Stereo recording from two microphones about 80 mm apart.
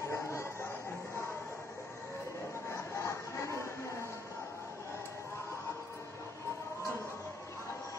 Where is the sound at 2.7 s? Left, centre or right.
Left.